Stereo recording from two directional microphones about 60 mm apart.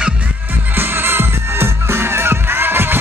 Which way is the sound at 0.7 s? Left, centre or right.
Right.